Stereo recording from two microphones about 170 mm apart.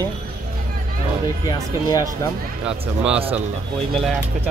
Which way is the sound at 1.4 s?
20° left (ahead or behind).